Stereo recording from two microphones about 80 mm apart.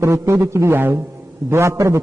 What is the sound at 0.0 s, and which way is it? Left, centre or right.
A man's voice, right.